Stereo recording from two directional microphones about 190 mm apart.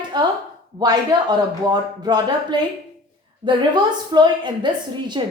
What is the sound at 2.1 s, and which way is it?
A woman's voice, 20° right (ahead or behind).